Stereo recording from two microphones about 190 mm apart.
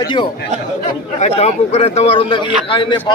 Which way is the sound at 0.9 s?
35° left (ahead or behind).